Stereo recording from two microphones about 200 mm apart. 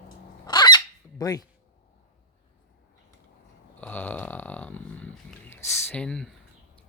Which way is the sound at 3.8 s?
10° left (ahead or behind).